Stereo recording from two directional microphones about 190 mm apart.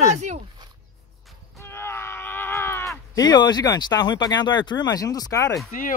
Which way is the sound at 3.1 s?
20° left (ahead or behind).